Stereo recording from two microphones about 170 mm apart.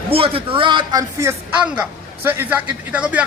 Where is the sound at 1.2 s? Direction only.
10° right (ahead or behind).